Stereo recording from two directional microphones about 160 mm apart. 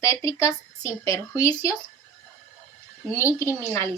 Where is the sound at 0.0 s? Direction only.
20° left (ahead or behind).